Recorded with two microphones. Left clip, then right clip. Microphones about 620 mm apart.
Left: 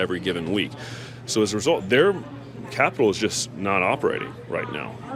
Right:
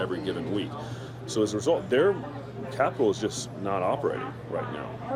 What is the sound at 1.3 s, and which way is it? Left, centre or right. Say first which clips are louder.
Speech: left 4 dB; left.